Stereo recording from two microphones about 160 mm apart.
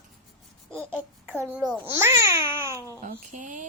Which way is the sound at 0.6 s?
5° left (ahead or behind).